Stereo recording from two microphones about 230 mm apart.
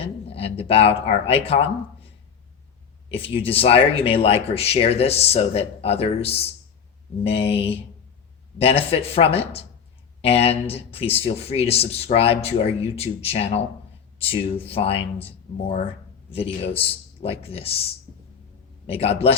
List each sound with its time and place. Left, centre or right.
0.0 s speech: left
3.1 s speech: left
16.3 s speech: left